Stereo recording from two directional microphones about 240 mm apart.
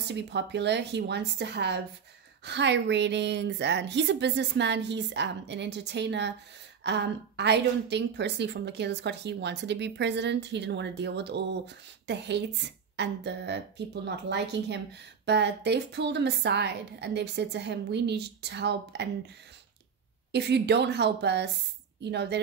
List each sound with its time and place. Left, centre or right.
0.1 s a woman's voice: right
20.2 s a woman's voice: right